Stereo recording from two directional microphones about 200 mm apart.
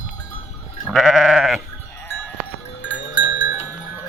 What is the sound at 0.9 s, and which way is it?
Sheep, centre (ahead or behind).